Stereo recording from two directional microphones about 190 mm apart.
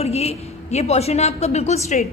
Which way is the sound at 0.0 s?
35° left (ahead or behind).